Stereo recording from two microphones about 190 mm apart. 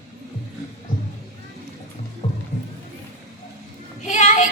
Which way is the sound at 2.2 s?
35° left (ahead or behind).